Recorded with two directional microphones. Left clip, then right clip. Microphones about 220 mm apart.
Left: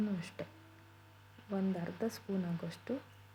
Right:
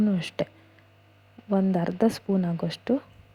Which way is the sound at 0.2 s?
25° right (ahead or behind).